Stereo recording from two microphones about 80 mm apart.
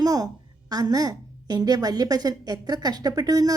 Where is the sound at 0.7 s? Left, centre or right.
Right.